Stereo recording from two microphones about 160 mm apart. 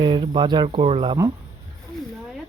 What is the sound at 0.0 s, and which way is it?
Speech, 30° right (ahead or behind).